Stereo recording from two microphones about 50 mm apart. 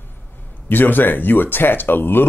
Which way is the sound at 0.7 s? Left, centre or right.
Left.